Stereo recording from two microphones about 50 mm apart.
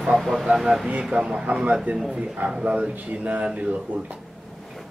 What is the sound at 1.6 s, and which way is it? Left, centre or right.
Speech, right.